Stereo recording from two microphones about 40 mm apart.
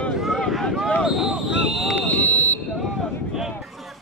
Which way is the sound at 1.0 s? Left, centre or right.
Centre.